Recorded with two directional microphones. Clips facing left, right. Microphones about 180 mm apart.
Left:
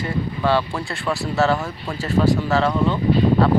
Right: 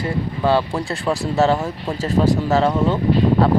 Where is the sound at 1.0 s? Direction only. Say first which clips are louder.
Right 2 dB; 15° right (ahead or behind).